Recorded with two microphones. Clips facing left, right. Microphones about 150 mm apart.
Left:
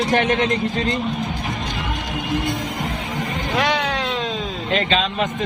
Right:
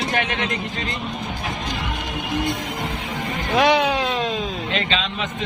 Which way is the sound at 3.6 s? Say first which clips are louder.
Right 5 dB; 10° right (ahead or behind).